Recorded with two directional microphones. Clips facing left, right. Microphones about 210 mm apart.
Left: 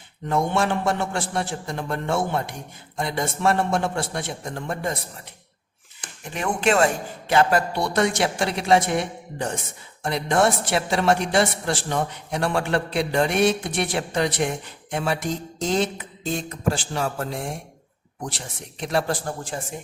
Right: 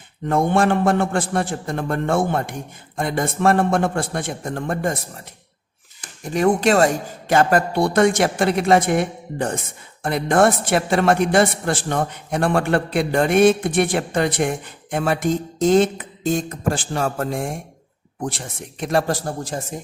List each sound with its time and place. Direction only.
0.3 s a woman's voice: 50° right (ahead or behind)
6.2 s a woman's voice: 40° right (ahead or behind)